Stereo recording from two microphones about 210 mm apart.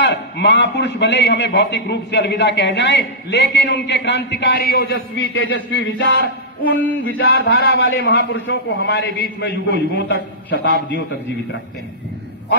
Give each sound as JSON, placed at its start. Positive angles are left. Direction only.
{"t": 0.0, "sound": "a man's voice", "side_deg": 55}
{"t": 7.1, "sound": "a man's voice", "side_deg": 55}